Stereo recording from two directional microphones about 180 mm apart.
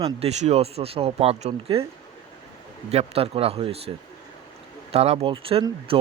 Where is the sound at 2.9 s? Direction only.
35° right (ahead or behind).